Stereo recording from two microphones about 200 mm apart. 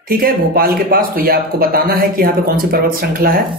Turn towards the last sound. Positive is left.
turn(degrees=-45)  # may be behind; listen again after turning